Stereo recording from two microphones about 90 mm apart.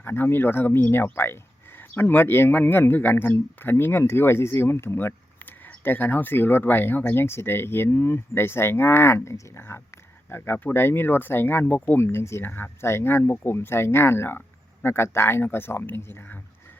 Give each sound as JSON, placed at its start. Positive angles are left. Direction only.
{"t": 0.0, "sound": "speech", "side_deg": 25}